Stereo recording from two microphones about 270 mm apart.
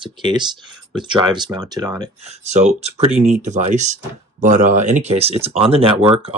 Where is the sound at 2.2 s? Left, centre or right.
Right.